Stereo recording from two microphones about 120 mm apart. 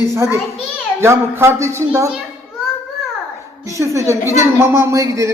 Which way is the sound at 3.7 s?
25° right (ahead or behind).